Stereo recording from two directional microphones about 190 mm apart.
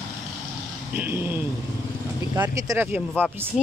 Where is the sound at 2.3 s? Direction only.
15° right (ahead or behind).